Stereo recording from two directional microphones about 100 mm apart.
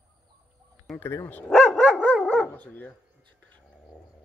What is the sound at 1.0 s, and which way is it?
Speech, 20° left (ahead or behind).